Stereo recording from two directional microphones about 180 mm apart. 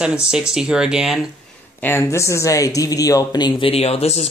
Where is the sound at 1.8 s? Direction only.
10° left (ahead or behind).